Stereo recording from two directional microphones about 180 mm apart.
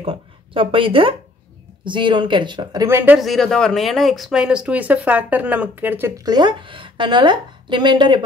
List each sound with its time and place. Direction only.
0.0 s a woman's voice: 30° right (ahead or behind); by 3.2 s 15° right (ahead or behind)
3.2 s speech: centre (ahead or behind); by 8.2 s 25° right (ahead or behind)